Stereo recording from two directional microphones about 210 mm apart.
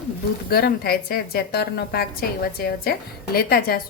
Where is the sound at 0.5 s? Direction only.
45° left (ahead or behind).